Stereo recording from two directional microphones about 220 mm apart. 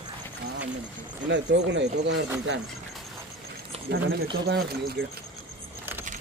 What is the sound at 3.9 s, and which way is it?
Speech, 50° right (ahead or behind).